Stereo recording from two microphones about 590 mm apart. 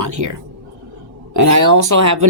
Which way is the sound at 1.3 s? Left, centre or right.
Right.